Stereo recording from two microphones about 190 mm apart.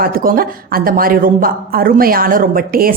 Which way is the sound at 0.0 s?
50° right (ahead or behind).